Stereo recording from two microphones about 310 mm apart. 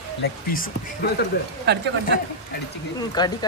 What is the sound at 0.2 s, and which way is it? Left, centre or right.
Speech, left.